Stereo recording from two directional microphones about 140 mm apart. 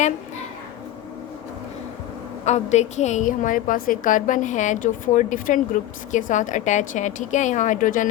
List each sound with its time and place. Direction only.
2.4 s a woman's voice: 55° left (ahead or behind); by 8.1 s 70° left (ahead or behind)